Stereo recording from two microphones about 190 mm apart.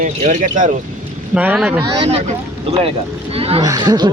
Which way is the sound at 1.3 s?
5° right (ahead or behind).